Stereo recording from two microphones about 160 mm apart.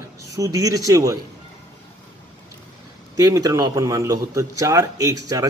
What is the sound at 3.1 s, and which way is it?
Speech, 20° right (ahead or behind).